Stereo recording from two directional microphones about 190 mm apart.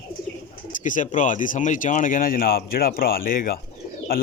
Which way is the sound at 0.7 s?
45° left (ahead or behind).